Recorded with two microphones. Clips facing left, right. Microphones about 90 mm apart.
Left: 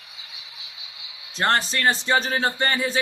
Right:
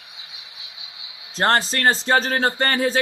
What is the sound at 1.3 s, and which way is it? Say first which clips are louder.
Speech: right 3 dB; 35° right (ahead or behind).